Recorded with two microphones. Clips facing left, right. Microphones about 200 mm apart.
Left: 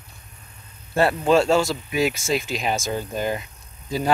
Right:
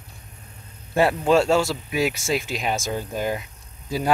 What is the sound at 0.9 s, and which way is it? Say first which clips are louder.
Speech: even; 10° right (ahead or behind).